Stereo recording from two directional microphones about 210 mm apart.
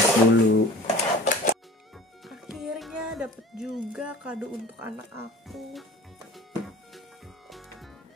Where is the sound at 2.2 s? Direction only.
Centre (ahead or behind).